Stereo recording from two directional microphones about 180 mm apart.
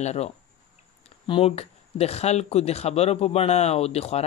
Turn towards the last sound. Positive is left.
turn(degrees=35)  # may be behind; listen again after turning